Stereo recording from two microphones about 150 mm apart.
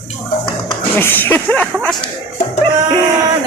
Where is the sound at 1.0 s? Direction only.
15° left (ahead or behind).